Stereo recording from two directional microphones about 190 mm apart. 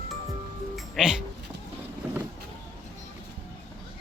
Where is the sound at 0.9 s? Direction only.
5° right (ahead or behind).